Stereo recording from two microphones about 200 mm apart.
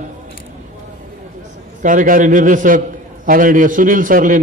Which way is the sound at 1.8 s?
40° right (ahead or behind).